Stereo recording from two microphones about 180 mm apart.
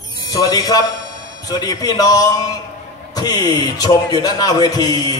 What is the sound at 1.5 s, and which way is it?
A man's voice, 20° left (ahead or behind).